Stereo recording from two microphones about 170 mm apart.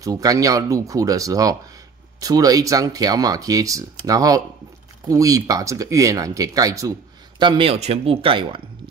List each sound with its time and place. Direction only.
0.0 s speech: 20° right (ahead or behind)